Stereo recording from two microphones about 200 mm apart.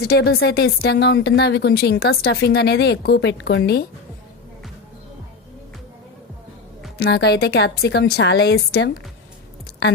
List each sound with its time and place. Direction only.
0.0 s speech: 50° left (ahead or behind)
7.0 s speech: 55° left (ahead or behind)